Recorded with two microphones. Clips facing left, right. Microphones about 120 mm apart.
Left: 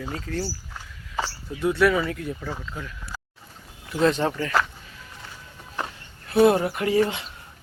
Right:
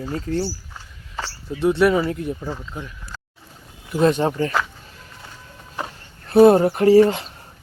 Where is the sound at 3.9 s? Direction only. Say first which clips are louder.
Right 4 dB; 15° right (ahead or behind).